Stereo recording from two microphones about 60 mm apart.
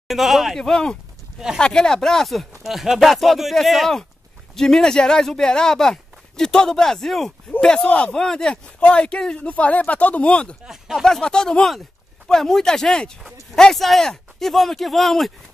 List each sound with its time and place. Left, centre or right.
0.1 s speech: centre
0.6 s speech: centre
2.6 s speech: centre
10.9 s speech: centre